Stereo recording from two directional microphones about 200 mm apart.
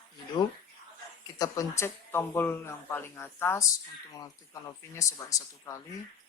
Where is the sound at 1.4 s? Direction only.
15° left (ahead or behind).